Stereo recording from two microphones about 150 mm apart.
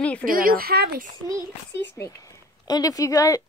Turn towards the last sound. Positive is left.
turn(degrees=20)  # may be behind; listen again after turning